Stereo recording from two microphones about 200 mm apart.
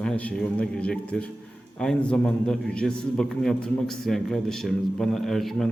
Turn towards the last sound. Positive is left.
turn(degrees=0)  # may be behind; listen again after turning